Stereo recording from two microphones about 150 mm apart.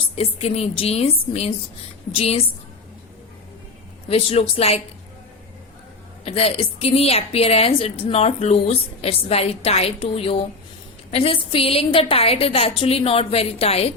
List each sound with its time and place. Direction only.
0.2 s a woman's voice: 45° left (ahead or behind)
4.1 s a woman's voice: 40° left (ahead or behind)
6.2 s a woman's voice: 40° left (ahead or behind)